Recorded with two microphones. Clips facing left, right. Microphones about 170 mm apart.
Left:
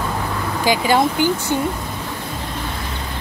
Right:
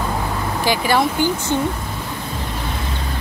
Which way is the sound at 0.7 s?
15° left (ahead or behind).